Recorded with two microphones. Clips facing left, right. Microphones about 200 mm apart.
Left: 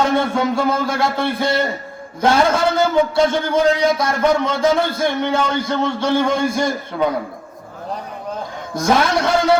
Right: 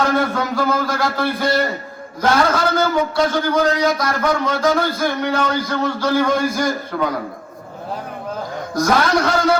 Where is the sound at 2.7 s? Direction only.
25° left (ahead or behind).